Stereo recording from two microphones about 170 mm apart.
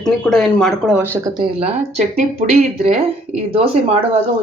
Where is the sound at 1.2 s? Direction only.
25° right (ahead or behind).